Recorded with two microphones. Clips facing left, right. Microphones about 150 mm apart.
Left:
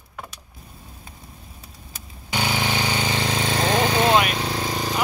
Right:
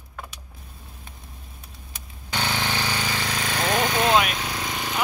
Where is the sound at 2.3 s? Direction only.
10° left (ahead or behind); by 4.1 s 30° left (ahead or behind).